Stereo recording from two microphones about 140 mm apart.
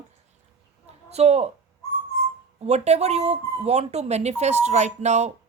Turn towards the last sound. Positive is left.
turn(degrees=-55)  # may be behind; listen again after turning